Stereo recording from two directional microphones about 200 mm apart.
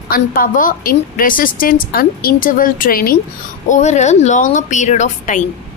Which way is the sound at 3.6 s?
35° left (ahead or behind).